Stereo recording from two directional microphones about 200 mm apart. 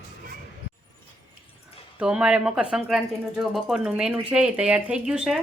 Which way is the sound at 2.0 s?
5° right (ahead or behind).